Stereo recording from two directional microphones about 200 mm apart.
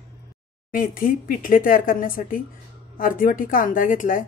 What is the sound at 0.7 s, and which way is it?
A woman's voice, 45° left (ahead or behind).